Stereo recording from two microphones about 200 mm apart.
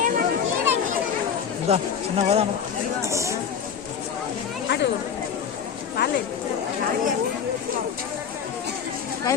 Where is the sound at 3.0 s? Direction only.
15° right (ahead or behind).